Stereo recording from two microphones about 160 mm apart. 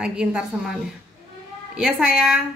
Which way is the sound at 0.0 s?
5° right (ahead or behind).